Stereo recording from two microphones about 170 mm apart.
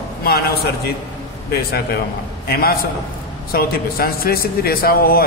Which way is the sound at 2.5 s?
65° left (ahead or behind).